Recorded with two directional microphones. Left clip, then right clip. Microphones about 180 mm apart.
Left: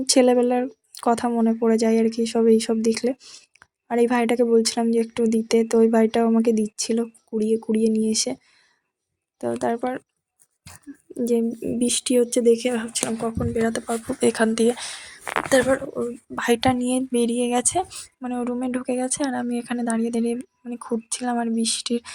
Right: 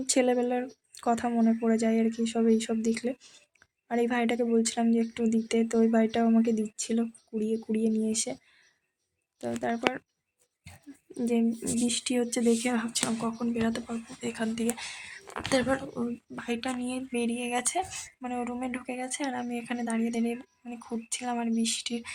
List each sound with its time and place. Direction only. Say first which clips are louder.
0.0 s speech: left 9 dB; 30° left (ahead or behind)
3.2 s speech: left 10 dB; 15° left (ahead or behind)
3.6 s speech: left 8 dB; 30° left (ahead or behind)
9.4 s speech: left 8 dB; 20° left (ahead or behind)
11.3 s speech: left 6 dB; 20° left (ahead or behind)
11.9 s speech: left 11 dB; 35° left (ahead or behind)
13.6 s speech: left 9 dB; 35° left (ahead or behind)
13.8 s speech: left 15 dB; 50° left (ahead or behind); by 15.1 s 30° left (ahead or behind)
15.2 s speech: left 17 dB; 80° left
15.4 s speech: left 8 dB; 35° left (ahead or behind)
17.8 s speech: left 4 dB; 15° left (ahead or behind)